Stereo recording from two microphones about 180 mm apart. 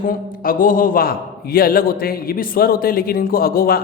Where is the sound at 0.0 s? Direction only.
50° left (ahead or behind).